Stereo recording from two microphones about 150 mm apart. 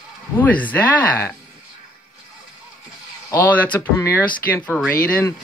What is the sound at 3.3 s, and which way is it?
Speech, 10° left (ahead or behind).